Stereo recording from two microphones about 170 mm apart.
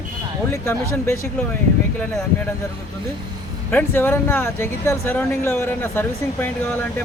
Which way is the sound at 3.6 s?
10° left (ahead or behind).